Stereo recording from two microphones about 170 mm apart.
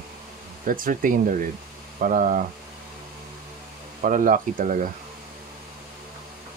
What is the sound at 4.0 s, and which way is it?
Speech, 50° right (ahead or behind).